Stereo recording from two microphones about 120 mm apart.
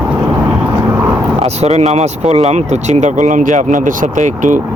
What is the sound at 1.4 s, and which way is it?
Speech, 65° right (ahead or behind).